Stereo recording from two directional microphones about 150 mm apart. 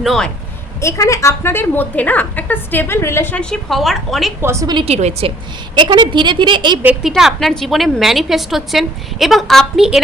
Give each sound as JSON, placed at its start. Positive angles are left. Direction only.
{"t": 0.0, "sound": "a woman's voice", "side_deg": 0}
{"t": 0.8, "sound": "a woman's voice", "side_deg": 20}
{"t": 4.4, "sound": "a woman's voice", "side_deg": -20}
{"t": 4.9, "sound": "a woman's voice", "side_deg": -45}
{"t": 5.7, "sound": "speech", "side_deg": -30}
{"t": 7.1, "sound": "a woman's voice", "side_deg": 0}